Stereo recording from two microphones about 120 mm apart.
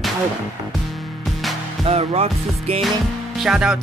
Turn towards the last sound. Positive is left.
turn(degrees=-5)  # may be behind; listen again after turning